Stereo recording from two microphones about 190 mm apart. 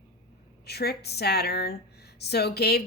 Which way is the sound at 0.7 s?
55° left (ahead or behind).